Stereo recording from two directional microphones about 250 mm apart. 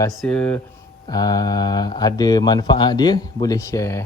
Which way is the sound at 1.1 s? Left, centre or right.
Centre.